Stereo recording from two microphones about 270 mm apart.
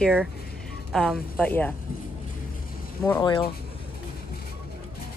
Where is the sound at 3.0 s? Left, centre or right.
Centre.